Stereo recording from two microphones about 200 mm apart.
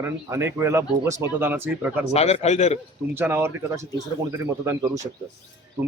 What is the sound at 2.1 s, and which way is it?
Speech, 30° left (ahead or behind).